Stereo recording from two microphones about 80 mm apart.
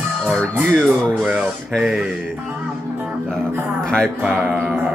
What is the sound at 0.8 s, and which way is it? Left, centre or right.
Speech, centre.